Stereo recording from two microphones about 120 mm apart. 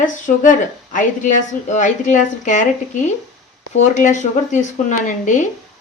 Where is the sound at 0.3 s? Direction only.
90° left.